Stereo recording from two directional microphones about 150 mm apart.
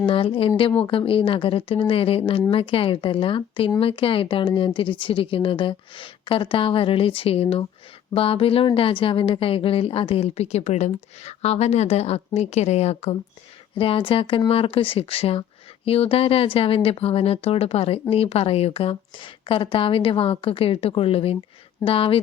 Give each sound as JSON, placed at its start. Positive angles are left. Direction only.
{"t": 0.0, "sound": "a woman's voice", "side_deg": 35}